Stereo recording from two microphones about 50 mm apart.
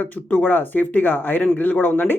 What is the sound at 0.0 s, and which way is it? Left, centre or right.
Speech, left.